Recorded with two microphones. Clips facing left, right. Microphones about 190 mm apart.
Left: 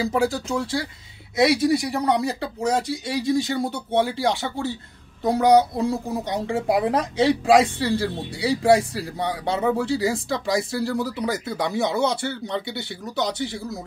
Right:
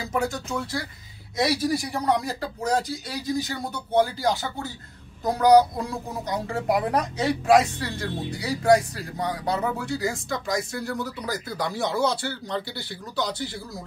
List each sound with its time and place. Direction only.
0.0 s a woman's voice: 30° left (ahead or behind)
2.9 s speech: 70° left (ahead or behind)
3.3 s a woman's voice: 25° left (ahead or behind)
5.2 s a woman's voice: 25° left (ahead or behind)